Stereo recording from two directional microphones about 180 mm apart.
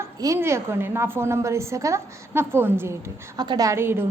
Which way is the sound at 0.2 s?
15° right (ahead or behind).